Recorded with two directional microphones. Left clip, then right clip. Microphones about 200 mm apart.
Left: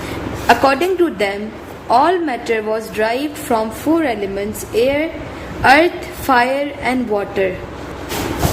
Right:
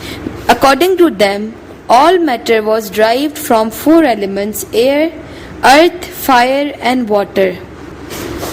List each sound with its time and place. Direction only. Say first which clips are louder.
0.4 s a woman's voice: right 4 dB; 50° right (ahead or behind)